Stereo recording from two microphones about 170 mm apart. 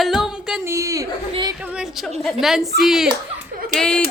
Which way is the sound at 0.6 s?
15° right (ahead or behind).